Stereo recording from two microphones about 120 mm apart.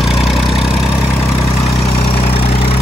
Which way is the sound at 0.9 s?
25° left (ahead or behind).